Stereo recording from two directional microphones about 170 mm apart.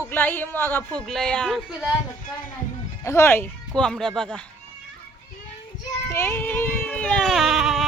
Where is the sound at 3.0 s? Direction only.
15° left (ahead or behind).